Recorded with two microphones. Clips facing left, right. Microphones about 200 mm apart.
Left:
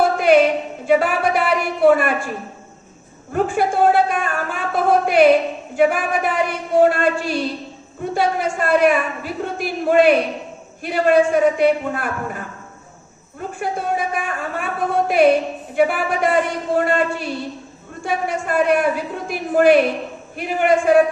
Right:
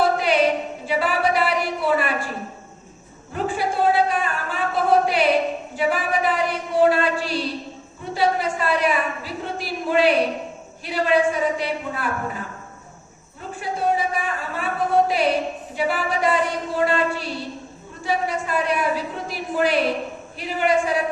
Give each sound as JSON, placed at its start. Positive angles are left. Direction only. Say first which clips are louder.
{"t": 0.0, "sound": "a sound", "louder": "left 5 dB", "side_deg": 50}
{"t": 0.9, "sound": "speech", "louder": "left 5 dB", "side_deg": 50}
{"t": 3.3, "sound": "a woman's voice", "louder": "left 5 dB", "side_deg": 50}
{"t": 13.6, "sound": "a woman's voice", "louder": "even", "side_deg": 55}